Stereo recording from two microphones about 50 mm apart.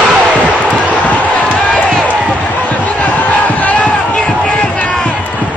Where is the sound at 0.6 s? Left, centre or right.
Left.